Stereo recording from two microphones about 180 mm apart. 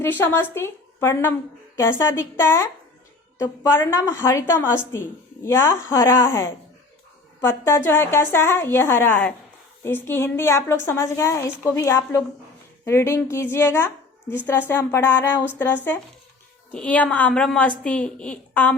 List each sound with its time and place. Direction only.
0.0 s a woman's voice: 10° left (ahead or behind)